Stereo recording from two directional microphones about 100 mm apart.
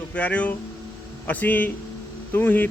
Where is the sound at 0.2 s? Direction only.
15° left (ahead or behind).